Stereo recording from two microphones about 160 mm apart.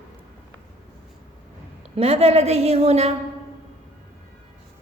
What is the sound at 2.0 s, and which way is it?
A woman's voice, 40° right (ahead or behind).